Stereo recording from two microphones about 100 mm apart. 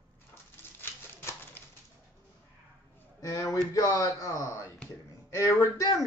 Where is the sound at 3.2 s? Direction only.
35° left (ahead or behind).